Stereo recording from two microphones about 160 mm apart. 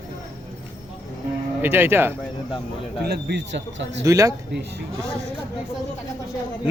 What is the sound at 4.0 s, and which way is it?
Speech, 20° right (ahead or behind).